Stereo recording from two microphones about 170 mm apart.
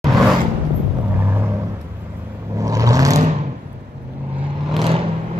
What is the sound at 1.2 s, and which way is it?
Vehicle, 15° right (ahead or behind).